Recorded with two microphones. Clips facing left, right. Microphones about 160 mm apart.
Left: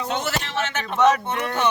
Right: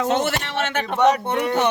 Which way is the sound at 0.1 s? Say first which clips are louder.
Right 4 dB; 55° right (ahead or behind).